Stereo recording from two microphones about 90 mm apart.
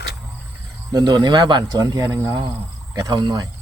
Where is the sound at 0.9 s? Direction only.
45° right (ahead or behind).